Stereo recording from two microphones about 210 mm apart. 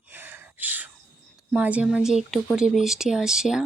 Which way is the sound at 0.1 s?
10° right (ahead or behind).